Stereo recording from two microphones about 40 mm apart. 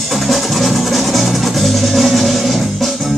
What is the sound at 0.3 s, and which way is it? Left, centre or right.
Music, centre.